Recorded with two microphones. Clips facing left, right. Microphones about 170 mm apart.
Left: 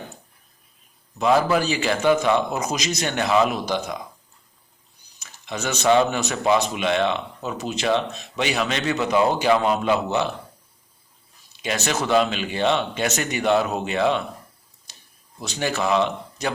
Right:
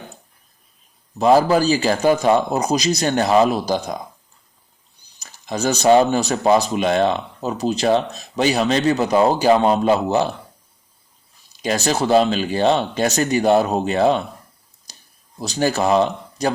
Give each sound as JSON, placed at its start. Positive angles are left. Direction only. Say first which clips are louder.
{"t": 1.2, "sound": "speech", "louder": "right 5 dB", "side_deg": -35}
{"t": 5.2, "sound": "speech", "louder": "right 7 dB", "side_deg": -35}
{"t": 11.5, "sound": "speech", "louder": "right 5 dB", "side_deg": -35}
{"t": 14.9, "sound": "a sound", "louder": "right 3 dB", "side_deg": -40}
{"t": 15.4, "sound": "speech", "louder": "right 6 dB", "side_deg": -35}